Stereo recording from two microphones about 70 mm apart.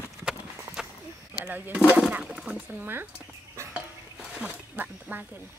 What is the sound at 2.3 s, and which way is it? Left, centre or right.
Speech, centre.